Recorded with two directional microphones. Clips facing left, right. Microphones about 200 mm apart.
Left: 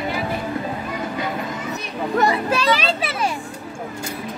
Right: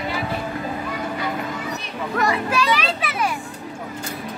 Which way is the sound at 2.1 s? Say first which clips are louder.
Left 2 dB; 25° left (ahead or behind).